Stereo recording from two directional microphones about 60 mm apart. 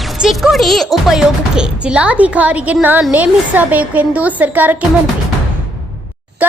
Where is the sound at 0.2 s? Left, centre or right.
Centre.